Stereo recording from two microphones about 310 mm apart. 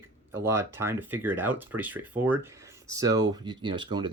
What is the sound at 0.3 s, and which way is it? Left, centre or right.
Speech, centre.